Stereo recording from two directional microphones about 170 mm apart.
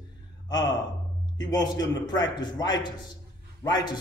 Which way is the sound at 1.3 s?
25° left (ahead or behind).